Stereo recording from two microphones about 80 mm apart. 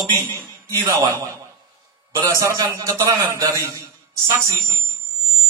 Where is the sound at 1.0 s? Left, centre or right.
Right.